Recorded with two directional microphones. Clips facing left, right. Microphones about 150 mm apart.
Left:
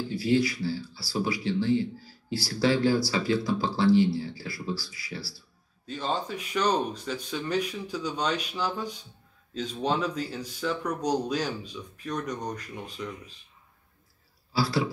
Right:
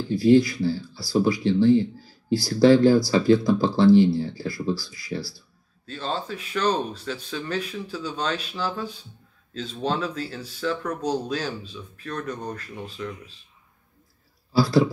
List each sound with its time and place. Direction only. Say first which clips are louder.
0.1 s speech: right 9 dB; 45° right (ahead or behind)
5.9 s speech: right 1 dB; 15° left (ahead or behind)
14.5 s speech: right 8 dB; 45° right (ahead or behind)